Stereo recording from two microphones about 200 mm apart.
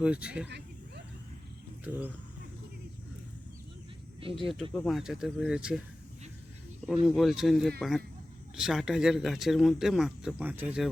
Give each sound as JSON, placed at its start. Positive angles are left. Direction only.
{"t": 0.0, "sound": "speech", "side_deg": -5}
{"t": 0.4, "sound": "a sound", "side_deg": -60}
{"t": 1.8, "sound": "speech", "side_deg": -10}
{"t": 4.4, "sound": "speech", "side_deg": 0}
{"t": 6.8, "sound": "speech", "side_deg": 0}